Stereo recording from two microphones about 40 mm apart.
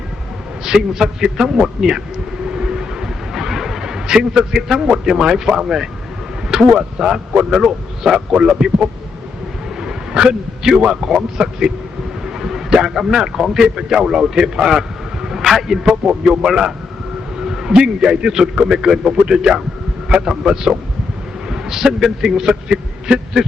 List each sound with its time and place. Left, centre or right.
0.6 s a man's voice: centre
9.8 s a sound: centre
10.8 s a man's voice: centre
12.2 s a sound: centre
13.0 s a man's voice: centre
17.4 s a man's voice: centre